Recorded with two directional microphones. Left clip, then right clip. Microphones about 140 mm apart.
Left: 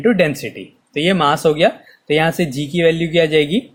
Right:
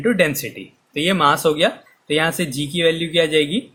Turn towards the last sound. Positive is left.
turn(degrees=35)  # may be behind; listen again after turning